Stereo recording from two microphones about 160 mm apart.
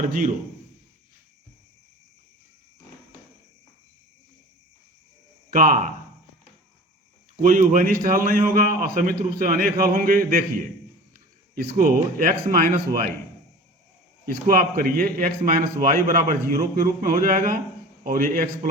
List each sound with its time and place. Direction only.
0.0 s a man's voice: 60° right (ahead or behind)
5.5 s speech: 60° right (ahead or behind)
7.4 s a man's voice: 60° right (ahead or behind)
11.5 s a man's voice: 60° right (ahead or behind)
12.6 s speech: 50° right (ahead or behind)
14.4 s a man's voice: 65° right (ahead or behind)